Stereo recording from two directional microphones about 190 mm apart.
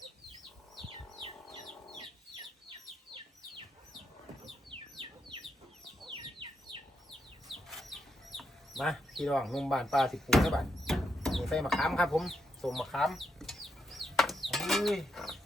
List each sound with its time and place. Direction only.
4.7 s bird: 25° right (ahead or behind)
6.0 s chicken: 25° right (ahead or behind)
7.4 s chicken: centre (ahead or behind)